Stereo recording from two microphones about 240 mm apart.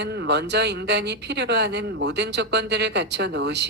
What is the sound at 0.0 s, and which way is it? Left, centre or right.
A woman's voice, right.